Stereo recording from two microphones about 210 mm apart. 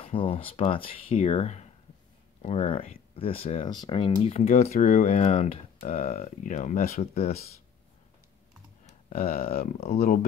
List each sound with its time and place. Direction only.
0.0 s speech: 25° left (ahead or behind); by 7.1 s 40° left (ahead or behind)
7.2 s speech: 30° left (ahead or behind)
9.1 s speech: 45° left (ahead or behind)
9.8 s speech: 30° left (ahead or behind)